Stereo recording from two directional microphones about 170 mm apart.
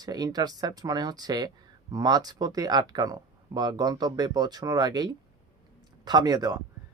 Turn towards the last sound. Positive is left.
turn(degrees=-20)  # may be behind; listen again after turning